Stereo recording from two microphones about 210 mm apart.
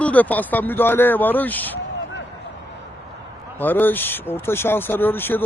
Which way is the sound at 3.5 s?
10° left (ahead or behind).